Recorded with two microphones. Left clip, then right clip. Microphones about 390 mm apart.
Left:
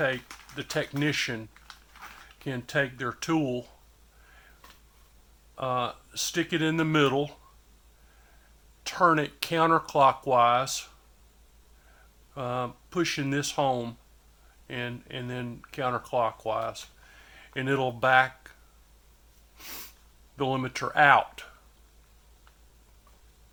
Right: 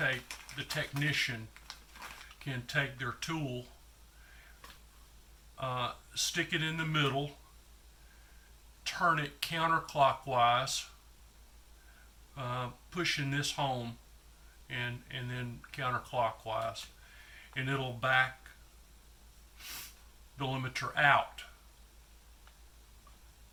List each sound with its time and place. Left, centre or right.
0.5 s speech: left
2.4 s speech: left
5.5 s speech: left
8.8 s speech: left
12.4 s speech: left
19.6 s speech: left